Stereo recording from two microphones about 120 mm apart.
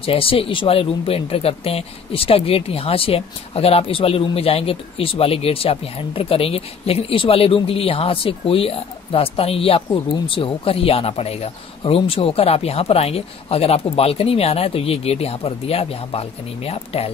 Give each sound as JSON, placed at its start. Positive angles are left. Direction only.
{"t": 0.0, "sound": "speech", "side_deg": 50}